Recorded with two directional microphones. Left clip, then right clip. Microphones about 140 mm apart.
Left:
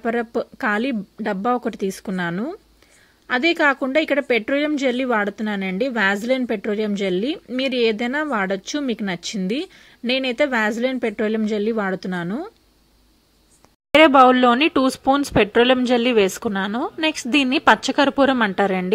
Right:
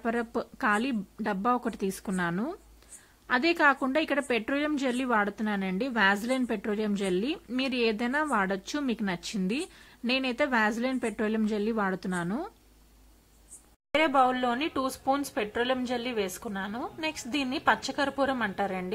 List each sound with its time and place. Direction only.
0.0 s a woman's voice: 25° left (ahead or behind)
13.9 s speech: 45° left (ahead or behind)